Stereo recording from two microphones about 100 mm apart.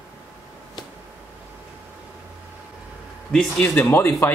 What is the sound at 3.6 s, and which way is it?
Speech, 20° left (ahead or behind).